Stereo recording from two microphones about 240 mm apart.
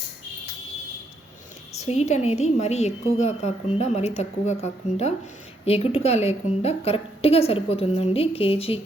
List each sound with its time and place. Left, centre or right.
1.8 s a woman's voice: left